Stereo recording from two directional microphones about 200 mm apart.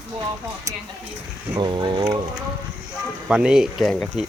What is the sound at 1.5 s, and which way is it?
Speech, 20° right (ahead or behind).